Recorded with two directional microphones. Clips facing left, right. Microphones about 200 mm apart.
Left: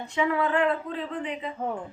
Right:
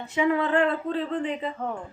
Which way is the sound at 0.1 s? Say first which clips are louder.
Right 3 dB; 25° right (ahead or behind).